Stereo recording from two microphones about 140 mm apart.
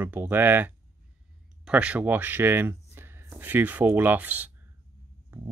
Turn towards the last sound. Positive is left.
turn(degrees=-15)  # may be behind; listen again after turning